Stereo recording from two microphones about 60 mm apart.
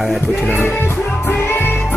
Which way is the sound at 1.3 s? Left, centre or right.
Left.